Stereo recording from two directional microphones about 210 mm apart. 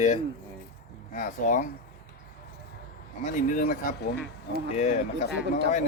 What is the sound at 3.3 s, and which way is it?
Speech, 40° left (ahead or behind).